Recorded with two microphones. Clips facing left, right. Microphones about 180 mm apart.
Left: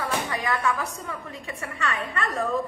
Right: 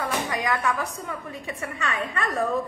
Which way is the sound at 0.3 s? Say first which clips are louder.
Right 1 dB; 15° right (ahead or behind).